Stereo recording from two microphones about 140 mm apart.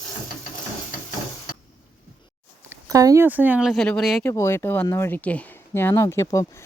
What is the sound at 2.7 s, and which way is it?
Speech, 25° right (ahead or behind).